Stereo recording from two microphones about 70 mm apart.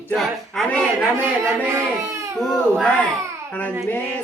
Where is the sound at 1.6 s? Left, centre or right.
Right.